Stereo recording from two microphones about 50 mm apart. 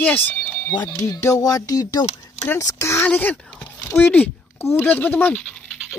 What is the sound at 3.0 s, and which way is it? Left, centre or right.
Speech, left.